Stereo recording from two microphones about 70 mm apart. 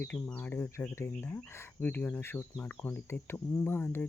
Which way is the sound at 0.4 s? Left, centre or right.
Left.